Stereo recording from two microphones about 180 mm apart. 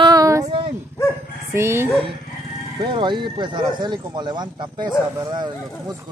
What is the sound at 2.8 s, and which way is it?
Speech, 25° right (ahead or behind).